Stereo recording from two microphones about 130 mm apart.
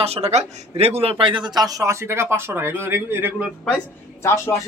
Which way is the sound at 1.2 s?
40° right (ahead or behind).